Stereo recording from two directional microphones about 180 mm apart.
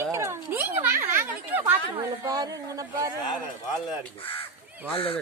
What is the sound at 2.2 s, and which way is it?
Speech, 20° right (ahead or behind).